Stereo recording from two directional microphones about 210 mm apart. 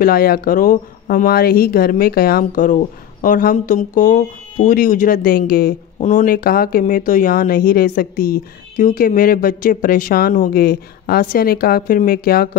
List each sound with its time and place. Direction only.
0.0 s speech: 45° left (ahead or behind)